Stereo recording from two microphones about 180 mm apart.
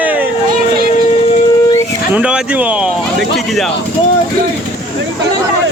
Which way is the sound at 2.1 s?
5° right (ahead or behind).